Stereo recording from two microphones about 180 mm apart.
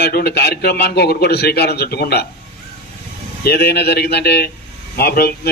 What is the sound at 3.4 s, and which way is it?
A man's voice, 65° left (ahead or behind).